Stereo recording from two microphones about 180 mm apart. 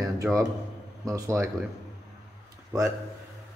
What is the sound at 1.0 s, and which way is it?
Speech, 20° right (ahead or behind).